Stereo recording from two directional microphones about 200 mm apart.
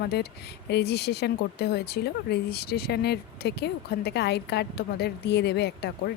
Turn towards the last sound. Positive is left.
turn(degrees=55)  # may be behind; listen again after turning